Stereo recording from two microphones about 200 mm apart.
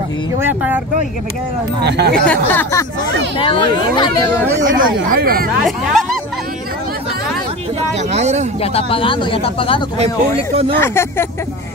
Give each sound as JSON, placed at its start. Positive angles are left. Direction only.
{"t": 0.4, "sound": "speech", "side_deg": -10}
{"t": 1.9, "sound": "speech", "side_deg": -55}
{"t": 2.1, "sound": "speech", "side_deg": 10}
{"t": 3.3, "sound": "speech", "side_deg": 25}
{"t": 4.7, "sound": "speech", "side_deg": -50}
{"t": 5.7, "sound": "speech", "side_deg": 0}
{"t": 8.1, "sound": "speech", "side_deg": -35}
{"t": 8.5, "sound": "speech", "side_deg": 30}
{"t": 9.9, "sound": "speech", "side_deg": -30}
{"t": 10.8, "sound": "speech", "side_deg": 10}